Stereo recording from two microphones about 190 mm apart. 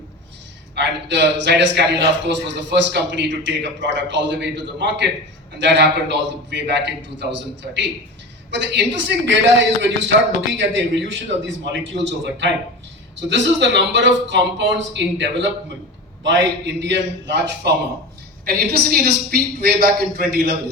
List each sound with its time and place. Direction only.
0.8 s a man's voice: 65° right (ahead or behind)